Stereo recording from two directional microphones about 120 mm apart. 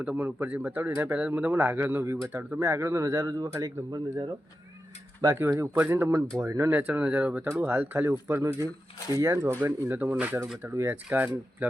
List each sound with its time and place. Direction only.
0.0 s speech: 15° right (ahead or behind)
5.2 s speech: 20° right (ahead or behind)